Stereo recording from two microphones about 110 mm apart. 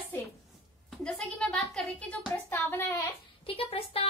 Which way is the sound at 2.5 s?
20° left (ahead or behind).